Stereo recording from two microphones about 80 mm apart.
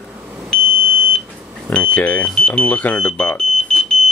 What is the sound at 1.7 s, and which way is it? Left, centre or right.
Speech, centre.